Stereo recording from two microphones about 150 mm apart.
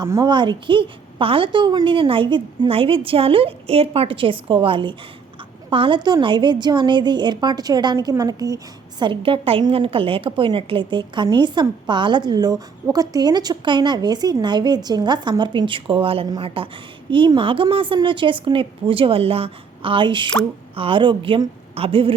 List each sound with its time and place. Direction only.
0.0 s a woman's voice: 25° right (ahead or behind)